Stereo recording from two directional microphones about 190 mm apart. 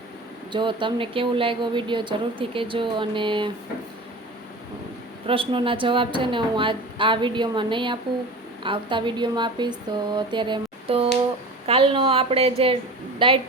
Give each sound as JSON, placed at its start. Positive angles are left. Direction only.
{"t": 0.5, "sound": "a woman's voice", "side_deg": -25}
{"t": 5.2, "sound": "a woman's voice", "side_deg": -30}